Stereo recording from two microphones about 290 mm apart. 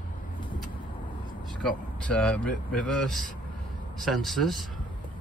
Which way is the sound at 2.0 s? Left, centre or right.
Centre.